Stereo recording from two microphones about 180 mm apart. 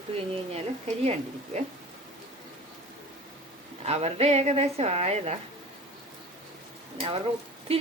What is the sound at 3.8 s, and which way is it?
Speech, 35° right (ahead or behind).